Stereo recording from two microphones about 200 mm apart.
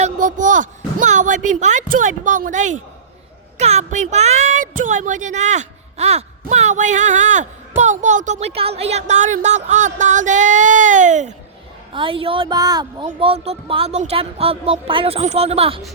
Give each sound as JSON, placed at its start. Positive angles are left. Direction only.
{"t": 0.0, "sound": "speech", "side_deg": -40}
{"t": 11.9, "sound": "speech", "side_deg": -25}